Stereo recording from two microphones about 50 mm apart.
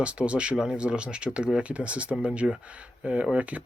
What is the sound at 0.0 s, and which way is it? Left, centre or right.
Speech, right.